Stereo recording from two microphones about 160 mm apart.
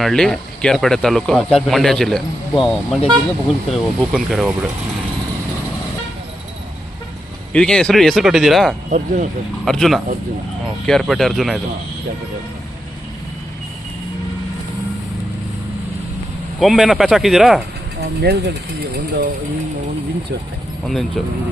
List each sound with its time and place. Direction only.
0.0 s speech: centre (ahead or behind)
7.5 s speech: 5° left (ahead or behind)
8.9 s speech: 50° right (ahead or behind)
9.6 s speech: centre (ahead or behind)
16.6 s speech: centre (ahead or behind)
18.0 s speech: 90° right
20.8 s speech: centre (ahead or behind)